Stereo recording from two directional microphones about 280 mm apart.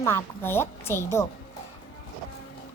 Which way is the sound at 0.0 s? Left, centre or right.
Centre.